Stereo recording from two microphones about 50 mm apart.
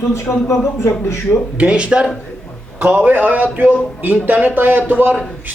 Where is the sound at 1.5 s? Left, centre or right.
Right.